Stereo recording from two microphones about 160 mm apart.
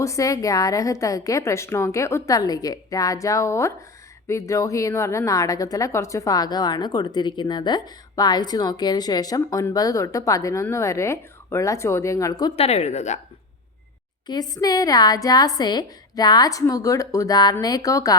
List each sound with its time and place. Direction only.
0.0 s a woman's voice: 20° left (ahead or behind)
12.5 s a woman's voice: 40° left (ahead or behind)
14.3 s a woman's voice: 25° left (ahead or behind)